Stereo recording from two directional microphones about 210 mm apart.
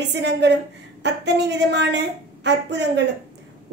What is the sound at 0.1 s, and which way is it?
Speech, 55° right (ahead or behind).